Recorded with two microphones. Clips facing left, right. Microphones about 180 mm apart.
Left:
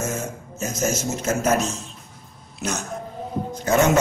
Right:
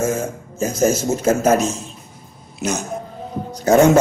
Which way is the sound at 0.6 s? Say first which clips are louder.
Right 7 dB; 30° right (ahead or behind).